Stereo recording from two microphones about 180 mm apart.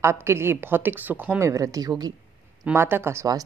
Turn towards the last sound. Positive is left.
turn(degrees=-15)  # may be behind; listen again after turning